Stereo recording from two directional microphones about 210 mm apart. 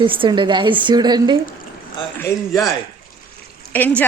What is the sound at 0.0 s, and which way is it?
A woman's voice, 25° right (ahead or behind).